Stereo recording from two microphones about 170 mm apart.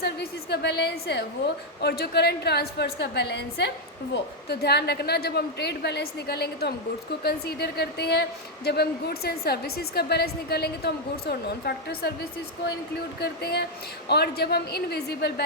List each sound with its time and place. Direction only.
0.0 s a woman's voice: 75° left (ahead or behind); by 1.2 s 90° left
1.8 s a woman's voice: 70° left (ahead or behind)
13.1 s a woman's voice: 70° left (ahead or behind)